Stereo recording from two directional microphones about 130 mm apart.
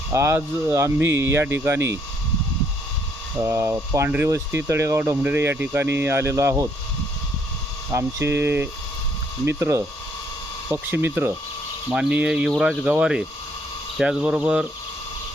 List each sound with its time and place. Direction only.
0.1 s speech: 20° right (ahead or behind)
3.3 s speech: 20° right (ahead or behind)
7.9 s speech: 20° right (ahead or behind)